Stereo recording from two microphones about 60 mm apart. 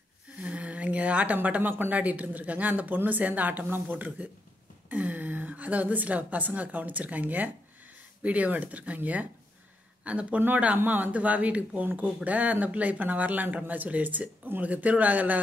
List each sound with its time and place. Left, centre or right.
0.4 s a woman's voice: right